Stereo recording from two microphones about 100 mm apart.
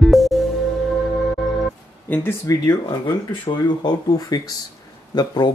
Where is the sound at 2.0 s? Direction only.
20° left (ahead or behind).